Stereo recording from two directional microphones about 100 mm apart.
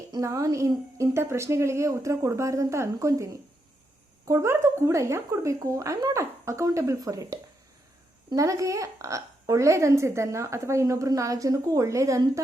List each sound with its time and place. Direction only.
0.2 s a woman's voice: 35° right (ahead or behind)
4.3 s a woman's voice: 30° right (ahead or behind)
8.4 s a woman's voice: 35° right (ahead or behind)